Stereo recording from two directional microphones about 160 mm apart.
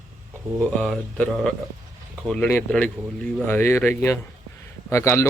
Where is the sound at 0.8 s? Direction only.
Centre (ahead or behind).